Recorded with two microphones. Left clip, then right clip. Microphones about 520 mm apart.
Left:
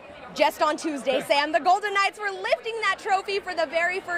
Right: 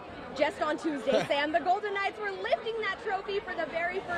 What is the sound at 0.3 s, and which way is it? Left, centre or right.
Speech, left.